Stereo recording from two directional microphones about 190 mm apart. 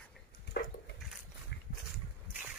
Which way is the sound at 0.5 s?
55° left (ahead or behind).